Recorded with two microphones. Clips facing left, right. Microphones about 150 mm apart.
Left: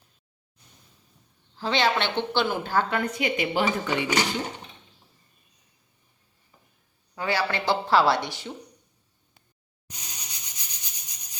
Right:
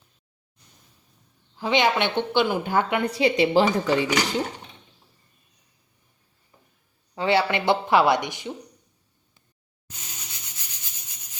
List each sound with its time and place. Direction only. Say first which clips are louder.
1.5 s a woman's voice: right 3 dB; 15° right (ahead or behind)
3.0 s a woman's voice: right 6 dB; 30° right (ahead or behind)
7.2 s speech: right 5 dB; 25° right (ahead or behind)
9.9 s rub: even; 15° left (ahead or behind)